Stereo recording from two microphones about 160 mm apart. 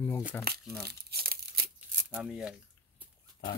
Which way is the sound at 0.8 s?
75° right (ahead or behind).